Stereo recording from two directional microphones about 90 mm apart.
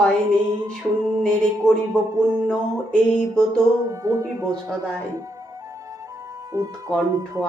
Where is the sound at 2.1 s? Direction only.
30° right (ahead or behind).